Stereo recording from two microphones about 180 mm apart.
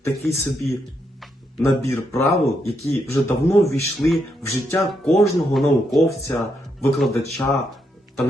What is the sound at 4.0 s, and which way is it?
Speech, centre (ahead or behind).